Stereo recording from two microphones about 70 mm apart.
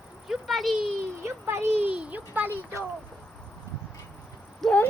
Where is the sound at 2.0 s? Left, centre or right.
Right.